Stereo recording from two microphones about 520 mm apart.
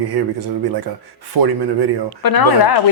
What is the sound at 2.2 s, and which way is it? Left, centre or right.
Speech, left.